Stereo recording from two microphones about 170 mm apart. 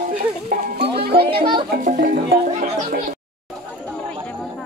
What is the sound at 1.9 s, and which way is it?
Music, 50° right (ahead or behind).